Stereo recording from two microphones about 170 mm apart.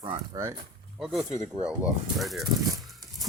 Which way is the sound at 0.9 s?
Centre (ahead or behind).